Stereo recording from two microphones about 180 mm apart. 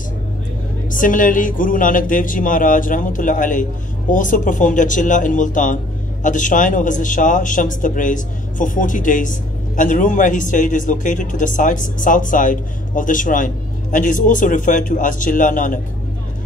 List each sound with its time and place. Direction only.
0.8 s speech: 45° left (ahead or behind)